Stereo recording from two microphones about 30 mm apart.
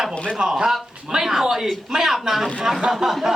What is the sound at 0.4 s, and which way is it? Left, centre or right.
Speech, right.